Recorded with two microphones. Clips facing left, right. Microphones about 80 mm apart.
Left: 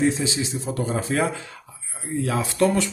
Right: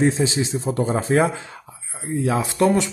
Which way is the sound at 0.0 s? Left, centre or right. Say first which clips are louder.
Right 3 dB; right.